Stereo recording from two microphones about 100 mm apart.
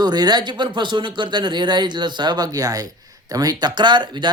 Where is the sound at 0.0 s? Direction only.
45° right (ahead or behind).